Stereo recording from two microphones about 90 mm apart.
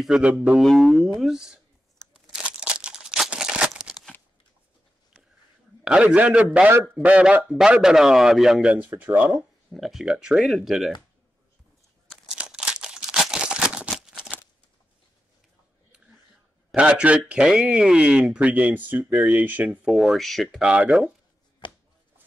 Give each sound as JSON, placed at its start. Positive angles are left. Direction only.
{"t": 0.2, "sound": "a man's voice", "side_deg": -15}
{"t": 0.6, "sound": "speech", "side_deg": 0}
{"t": 2.1, "sound": "a sound", "side_deg": -10}
{"t": 5.9, "sound": "a man's voice", "side_deg": -15}
{"t": 9.7, "sound": "speech", "side_deg": 0}
{"t": 12.3, "sound": "a sound", "side_deg": -10}
{"t": 16.7, "sound": "a man's voice", "side_deg": -10}
{"t": 20.5, "sound": "a man's voice", "side_deg": -10}
{"t": 21.6, "sound": "chopping", "side_deg": 70}